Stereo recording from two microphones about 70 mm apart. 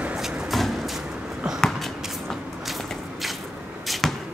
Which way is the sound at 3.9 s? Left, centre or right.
Centre.